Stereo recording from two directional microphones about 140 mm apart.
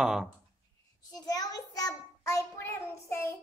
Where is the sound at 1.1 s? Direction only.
30° left (ahead or behind).